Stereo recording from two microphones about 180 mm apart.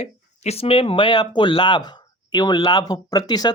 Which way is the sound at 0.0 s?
35° left (ahead or behind).